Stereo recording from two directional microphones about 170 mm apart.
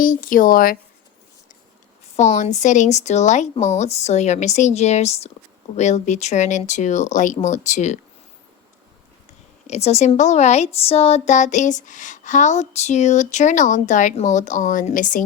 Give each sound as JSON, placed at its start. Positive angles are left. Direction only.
{"t": 0.0, "sound": "a woman's voice", "side_deg": 55}
{"t": 2.1, "sound": "speech", "side_deg": 40}
{"t": 9.6, "sound": "speech", "side_deg": 40}